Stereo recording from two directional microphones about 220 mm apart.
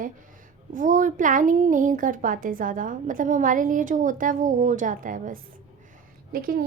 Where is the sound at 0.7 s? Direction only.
35° right (ahead or behind).